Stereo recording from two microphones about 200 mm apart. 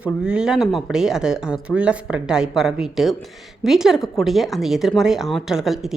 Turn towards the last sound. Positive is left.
turn(degrees=0)  # may be behind; listen again after turning